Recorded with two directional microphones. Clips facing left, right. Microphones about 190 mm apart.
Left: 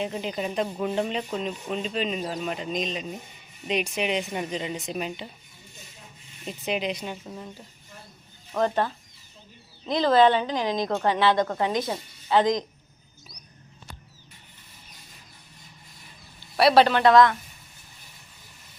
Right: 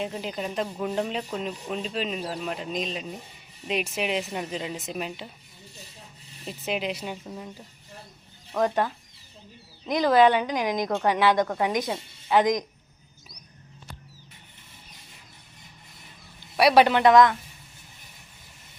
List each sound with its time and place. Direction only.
0.0 s speech: centre (ahead or behind)
6.4 s speech: centre (ahead or behind)
8.6 s a woman's voice: 15° right (ahead or behind)
9.9 s a woman's voice: 15° right (ahead or behind)
16.6 s a woman's voice: 15° right (ahead or behind)